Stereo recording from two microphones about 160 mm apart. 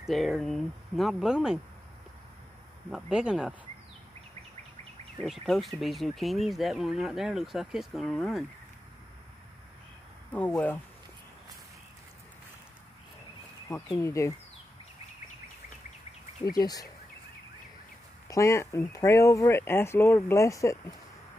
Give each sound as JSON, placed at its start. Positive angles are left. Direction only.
{"t": 0.0, "sound": "speech", "side_deg": 0}
{"t": 2.9, "sound": "speech", "side_deg": -5}
{"t": 5.2, "sound": "speech", "side_deg": 0}
{"t": 10.3, "sound": "speech", "side_deg": 10}
{"t": 13.9, "sound": "speech", "side_deg": 20}
{"t": 16.4, "sound": "speech", "side_deg": 25}
{"t": 18.3, "sound": "speech", "side_deg": 20}